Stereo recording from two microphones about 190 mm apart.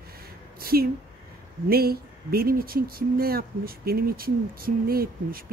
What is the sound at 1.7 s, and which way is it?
Speech, 55° right (ahead or behind).